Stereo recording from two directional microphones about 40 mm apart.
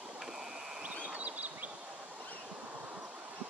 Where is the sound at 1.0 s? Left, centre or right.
Right.